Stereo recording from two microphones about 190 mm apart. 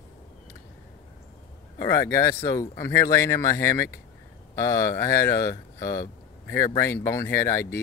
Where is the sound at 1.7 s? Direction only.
15° left (ahead or behind).